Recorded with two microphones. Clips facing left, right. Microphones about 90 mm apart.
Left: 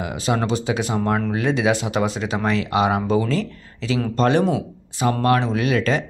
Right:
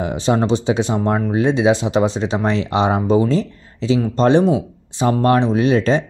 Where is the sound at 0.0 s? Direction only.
30° right (ahead or behind).